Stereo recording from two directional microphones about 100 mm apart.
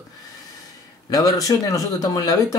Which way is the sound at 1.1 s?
35° left (ahead or behind).